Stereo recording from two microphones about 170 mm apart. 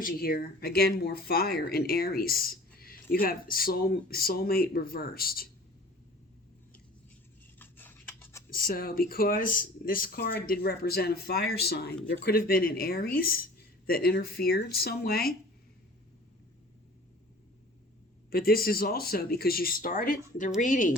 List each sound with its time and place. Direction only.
0.0 s speech: 60° left (ahead or behind)
7.6 s a sound: 10° left (ahead or behind)
8.4 s speech: 60° left (ahead or behind)
18.3 s speech: 60° left (ahead or behind)